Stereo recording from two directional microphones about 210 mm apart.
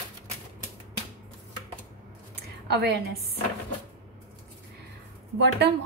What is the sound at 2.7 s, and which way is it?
Speech, 50° right (ahead or behind).